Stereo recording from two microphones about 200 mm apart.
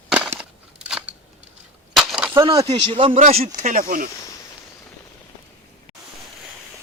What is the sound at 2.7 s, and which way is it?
A man's voice, 30° right (ahead or behind).